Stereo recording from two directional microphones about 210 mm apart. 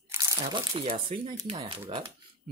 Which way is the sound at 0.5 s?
25° right (ahead or behind).